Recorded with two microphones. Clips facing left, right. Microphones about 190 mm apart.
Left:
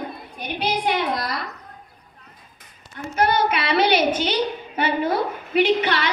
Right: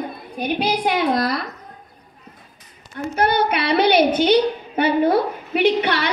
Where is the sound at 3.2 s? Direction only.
60° right (ahead or behind).